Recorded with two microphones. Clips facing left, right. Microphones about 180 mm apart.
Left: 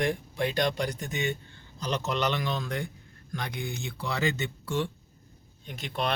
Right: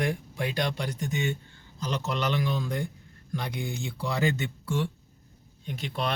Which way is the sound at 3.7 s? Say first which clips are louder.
Right 2 dB; 60° left (ahead or behind).